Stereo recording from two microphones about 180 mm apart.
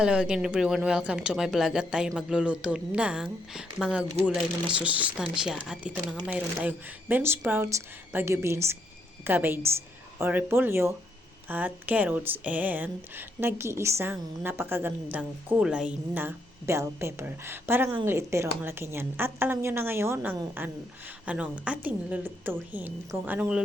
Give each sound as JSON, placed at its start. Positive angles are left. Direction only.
{"t": 0.0, "sound": "speech", "side_deg": -5}